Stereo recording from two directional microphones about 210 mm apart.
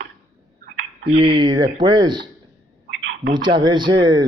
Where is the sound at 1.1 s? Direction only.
25° right (ahead or behind).